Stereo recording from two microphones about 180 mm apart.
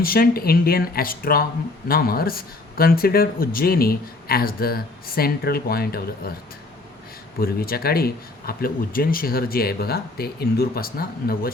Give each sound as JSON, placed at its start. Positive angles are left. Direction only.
{"t": 0.0, "sound": "a man's voice", "side_deg": 55}
{"t": 7.3, "sound": "a man's voice", "side_deg": 55}